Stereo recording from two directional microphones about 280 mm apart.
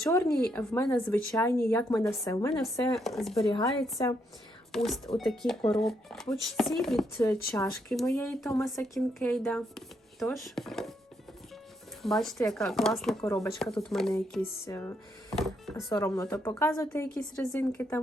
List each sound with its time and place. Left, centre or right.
0.0 s a woman's voice: centre
4.0 s a woman's voice: centre
4.7 s speech: centre
12.0 s a woman's voice: centre